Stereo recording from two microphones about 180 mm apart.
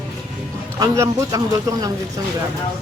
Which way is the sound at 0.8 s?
20° right (ahead or behind).